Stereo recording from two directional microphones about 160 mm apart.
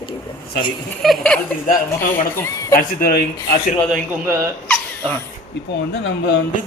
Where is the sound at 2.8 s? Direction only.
70° left (ahead or behind).